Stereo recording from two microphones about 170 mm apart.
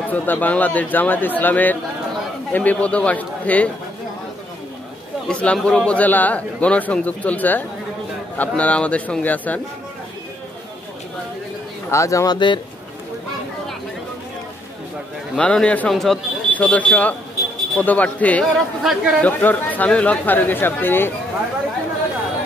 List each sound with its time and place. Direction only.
0.1 s a man's voice: 10° left (ahead or behind)
5.3 s a man's voice: 5° left (ahead or behind)
11.9 s speech: 20° left (ahead or behind)
15.3 s a man's voice: 5° left (ahead or behind)